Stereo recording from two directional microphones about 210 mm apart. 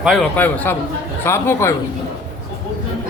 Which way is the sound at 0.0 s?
Centre (ahead or behind).